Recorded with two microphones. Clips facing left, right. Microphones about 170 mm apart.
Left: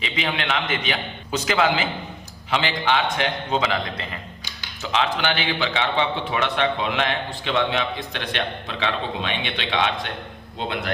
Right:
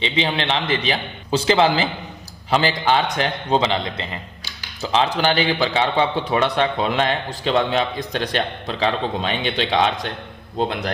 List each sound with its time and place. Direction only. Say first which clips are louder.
0.0 s a man's voice: right 5 dB; 30° right (ahead or behind)
4.8 s a man's voice: right 4 dB; 35° right (ahead or behind)